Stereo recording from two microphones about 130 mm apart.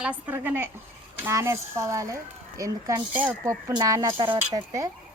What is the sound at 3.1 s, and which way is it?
Speech, 15° right (ahead or behind).